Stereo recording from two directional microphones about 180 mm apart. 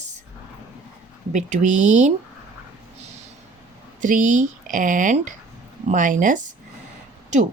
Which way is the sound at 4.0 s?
45° right (ahead or behind).